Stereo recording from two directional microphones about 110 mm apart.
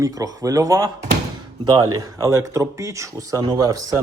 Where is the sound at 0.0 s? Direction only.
30° right (ahead or behind).